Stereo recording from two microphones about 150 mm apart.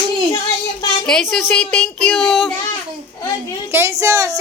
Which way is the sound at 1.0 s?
Centre (ahead or behind).